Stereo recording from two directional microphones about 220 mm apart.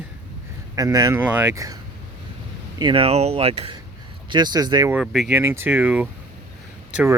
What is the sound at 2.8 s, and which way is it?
Speech, 20° right (ahead or behind).